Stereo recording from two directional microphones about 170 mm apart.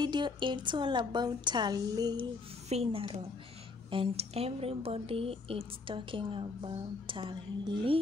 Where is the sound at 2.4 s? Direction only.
35° right (ahead or behind).